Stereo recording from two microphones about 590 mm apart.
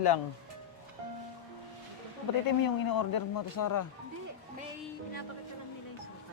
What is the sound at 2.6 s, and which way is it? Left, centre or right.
Speech, left.